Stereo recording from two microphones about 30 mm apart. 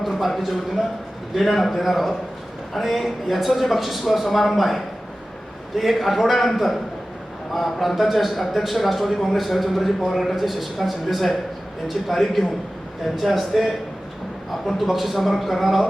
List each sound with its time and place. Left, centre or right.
0.2 s a man's voice: centre